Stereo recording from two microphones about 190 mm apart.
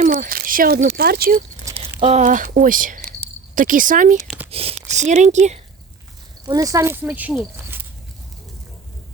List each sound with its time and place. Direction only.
0.0 s speech: 45° right (ahead or behind)
1.6 s a sound: 10° right (ahead or behind)
2.0 s speech: 35° right (ahead or behind)
4.5 s speech: 30° right (ahead or behind)
6.4 s speech: 20° right (ahead or behind)